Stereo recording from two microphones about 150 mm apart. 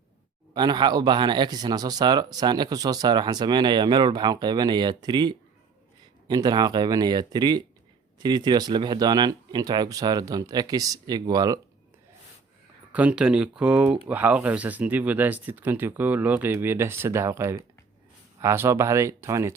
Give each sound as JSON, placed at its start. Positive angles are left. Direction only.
{"t": 0.5, "sound": "speech", "side_deg": -30}
{"t": 12.9, "sound": "speech", "side_deg": -10}